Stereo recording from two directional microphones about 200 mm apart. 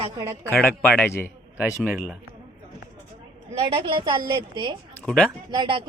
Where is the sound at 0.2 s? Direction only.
15° right (ahead or behind).